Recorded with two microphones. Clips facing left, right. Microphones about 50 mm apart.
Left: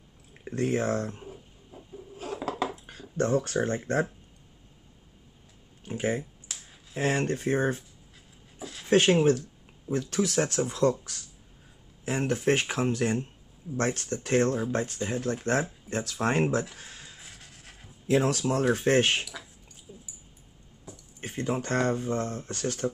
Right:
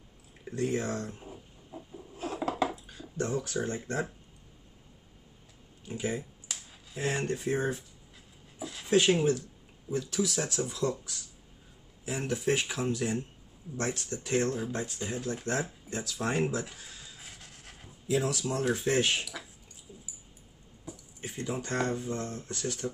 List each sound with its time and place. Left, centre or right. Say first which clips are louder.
0.5 s speech: left 4 dB; left
2.2 s a sound: right 1 dB; centre
2.7 s speech: left 2 dB; left
5.9 s speech: left 4 dB; left
8.8 s speech: left 4 dB; left
21.2 s speech: left 5 dB; left